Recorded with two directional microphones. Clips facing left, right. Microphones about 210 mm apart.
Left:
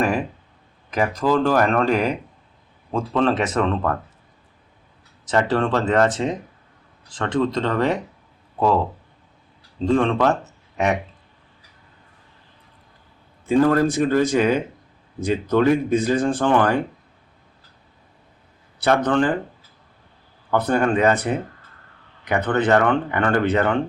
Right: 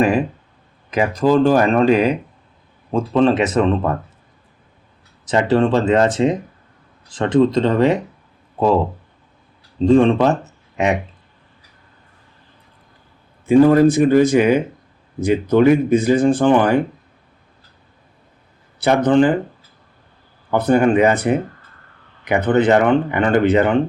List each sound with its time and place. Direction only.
0.9 s speech: 20° right (ahead or behind)
5.3 s speech: 15° right (ahead or behind)
9.8 s speech: 20° right (ahead or behind)
13.5 s speech: 15° right (ahead or behind)
18.9 s speech: 10° right (ahead or behind)
20.5 s speech: 10° right (ahead or behind)